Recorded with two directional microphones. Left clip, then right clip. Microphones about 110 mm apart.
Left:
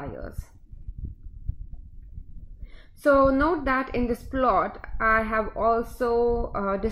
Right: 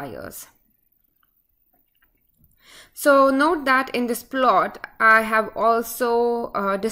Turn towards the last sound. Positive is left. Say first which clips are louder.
# right 4 dB
turn(degrees=-20)  # may be behind; listen again after turning